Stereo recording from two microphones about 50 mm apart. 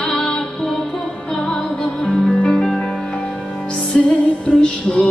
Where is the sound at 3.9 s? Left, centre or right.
Centre.